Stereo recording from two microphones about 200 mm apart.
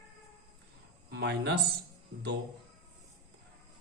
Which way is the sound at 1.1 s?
55° right (ahead or behind).